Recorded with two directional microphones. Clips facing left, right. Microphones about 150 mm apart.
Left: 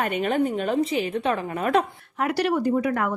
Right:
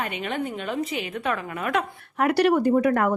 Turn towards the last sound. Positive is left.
turn(degrees=-50)  # may be behind; listen again after turning